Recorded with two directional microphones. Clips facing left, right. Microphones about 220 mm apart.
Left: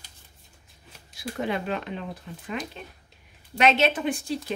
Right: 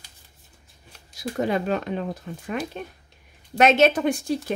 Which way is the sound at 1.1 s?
40° right (ahead or behind).